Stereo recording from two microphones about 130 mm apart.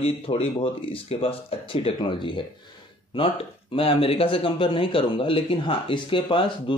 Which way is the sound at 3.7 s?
45° left (ahead or behind).